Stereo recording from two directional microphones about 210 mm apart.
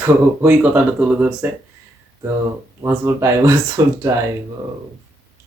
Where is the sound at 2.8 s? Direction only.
10° right (ahead or behind).